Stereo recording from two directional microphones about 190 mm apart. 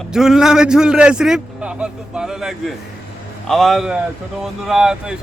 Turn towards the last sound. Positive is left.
turn(degrees=-5)  # may be behind; listen again after turning